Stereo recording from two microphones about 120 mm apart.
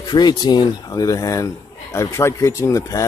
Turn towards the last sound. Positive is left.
turn(degrees=25)  # may be behind; listen again after turning